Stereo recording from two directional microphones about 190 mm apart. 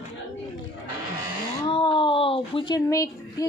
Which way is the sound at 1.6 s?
25° left (ahead or behind).